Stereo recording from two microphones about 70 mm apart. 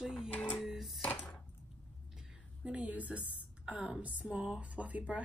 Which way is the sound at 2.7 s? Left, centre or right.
Right.